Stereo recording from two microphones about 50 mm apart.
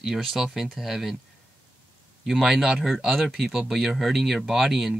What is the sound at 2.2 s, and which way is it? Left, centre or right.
Speech, centre.